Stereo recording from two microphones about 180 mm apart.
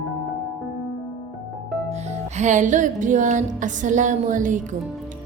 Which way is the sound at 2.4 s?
45° right (ahead or behind).